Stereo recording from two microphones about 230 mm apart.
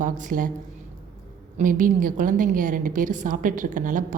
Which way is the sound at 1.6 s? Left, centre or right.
Right.